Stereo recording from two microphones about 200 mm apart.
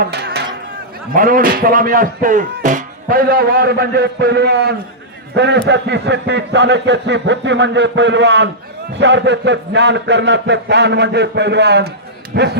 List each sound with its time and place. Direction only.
0.0 s speech: 50° right (ahead or behind)
1.1 s a man's voice: 45° right (ahead or behind)